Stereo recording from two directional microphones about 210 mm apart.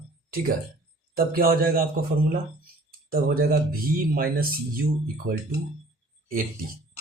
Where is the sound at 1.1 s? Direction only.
45° right (ahead or behind).